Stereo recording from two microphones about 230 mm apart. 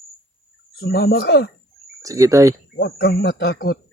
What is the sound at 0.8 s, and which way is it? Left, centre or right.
Speech, left.